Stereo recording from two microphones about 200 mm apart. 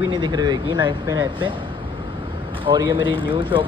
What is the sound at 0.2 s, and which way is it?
Speech, 20° right (ahead or behind).